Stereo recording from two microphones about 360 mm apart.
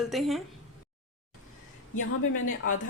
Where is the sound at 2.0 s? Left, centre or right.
Left.